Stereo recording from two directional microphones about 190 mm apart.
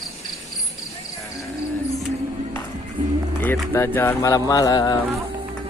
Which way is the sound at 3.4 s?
10° left (ahead or behind).